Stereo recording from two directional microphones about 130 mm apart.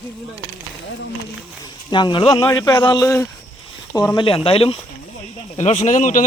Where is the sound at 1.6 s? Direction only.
35° left (ahead or behind).